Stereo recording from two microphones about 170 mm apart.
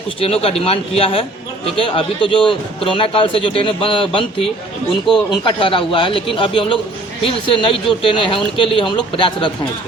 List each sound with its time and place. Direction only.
0.2 s speech: 35° left (ahead or behind)
5.3 s a man's voice: 30° left (ahead or behind)